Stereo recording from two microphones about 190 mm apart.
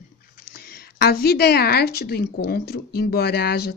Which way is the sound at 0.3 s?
55° left (ahead or behind).